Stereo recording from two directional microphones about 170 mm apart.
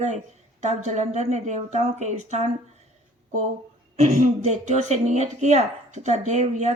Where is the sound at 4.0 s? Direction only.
40° right (ahead or behind).